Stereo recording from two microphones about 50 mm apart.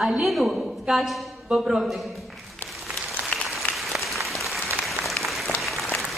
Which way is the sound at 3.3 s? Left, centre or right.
Left.